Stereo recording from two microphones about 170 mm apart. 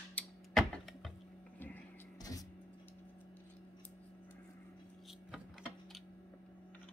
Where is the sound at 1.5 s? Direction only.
10° left (ahead or behind).